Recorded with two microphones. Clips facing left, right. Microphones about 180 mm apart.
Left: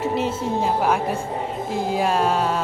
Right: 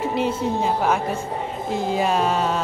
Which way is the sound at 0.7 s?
5° left (ahead or behind).